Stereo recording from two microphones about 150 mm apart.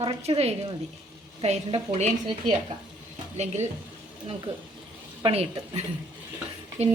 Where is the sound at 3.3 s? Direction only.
50° right (ahead or behind).